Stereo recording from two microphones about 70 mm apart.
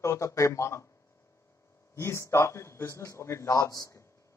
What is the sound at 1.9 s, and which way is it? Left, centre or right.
A man's voice, left.